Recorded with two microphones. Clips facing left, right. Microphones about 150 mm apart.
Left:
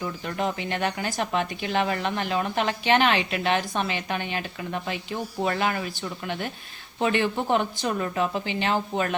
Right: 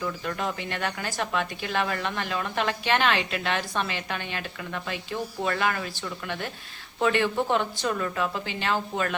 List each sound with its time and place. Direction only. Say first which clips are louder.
0.3 s speech: left 3 dB; 20° left (ahead or behind)